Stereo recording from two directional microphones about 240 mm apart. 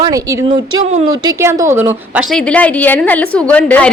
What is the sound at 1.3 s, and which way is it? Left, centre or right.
Speech, centre.